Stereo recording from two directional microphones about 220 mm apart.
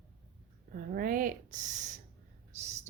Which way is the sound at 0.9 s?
40° right (ahead or behind).